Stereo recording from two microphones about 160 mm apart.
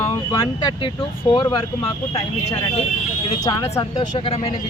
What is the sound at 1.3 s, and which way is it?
Speech, 30° left (ahead or behind).